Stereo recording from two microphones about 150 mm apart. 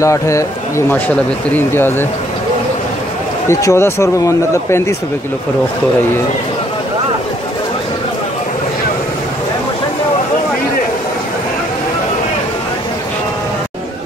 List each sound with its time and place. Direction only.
0.0 s speech: 20° left (ahead or behind)
3.4 s speech: 15° left (ahead or behind)